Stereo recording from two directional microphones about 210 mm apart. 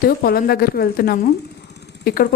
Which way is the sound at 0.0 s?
45° left (ahead or behind).